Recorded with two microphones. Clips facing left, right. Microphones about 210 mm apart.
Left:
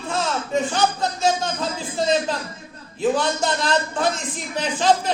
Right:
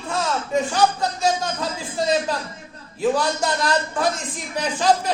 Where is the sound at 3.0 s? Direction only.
25° left (ahead or behind).